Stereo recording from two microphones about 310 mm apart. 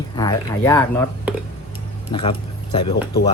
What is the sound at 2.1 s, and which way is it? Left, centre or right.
Speech, centre.